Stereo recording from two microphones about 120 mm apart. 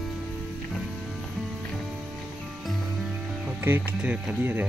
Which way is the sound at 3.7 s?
15° right (ahead or behind).